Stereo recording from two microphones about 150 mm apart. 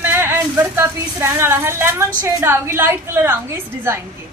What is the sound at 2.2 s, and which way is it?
A woman's voice, 15° right (ahead or behind).